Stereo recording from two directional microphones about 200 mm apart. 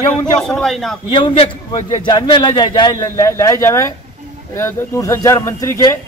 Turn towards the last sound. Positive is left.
turn(degrees=15)  # may be behind; listen again after turning